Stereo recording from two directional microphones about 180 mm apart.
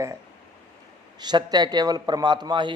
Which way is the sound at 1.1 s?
25° right (ahead or behind).